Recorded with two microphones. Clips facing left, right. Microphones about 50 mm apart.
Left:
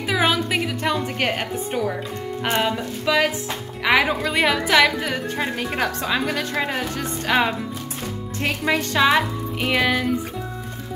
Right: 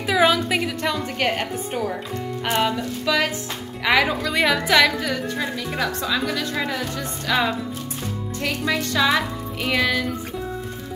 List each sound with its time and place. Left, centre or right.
0.0 s music: centre
0.8 s a woman's voice: centre
2.6 s music: centre
3.8 s a woman's voice: centre
5.4 s speech: left
8.7 s a woman's voice: left